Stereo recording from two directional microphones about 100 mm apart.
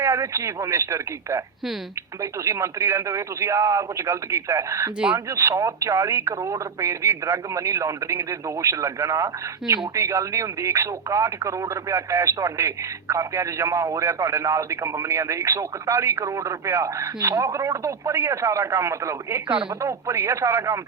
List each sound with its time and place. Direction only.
0.0 s speech: 25° right (ahead or behind)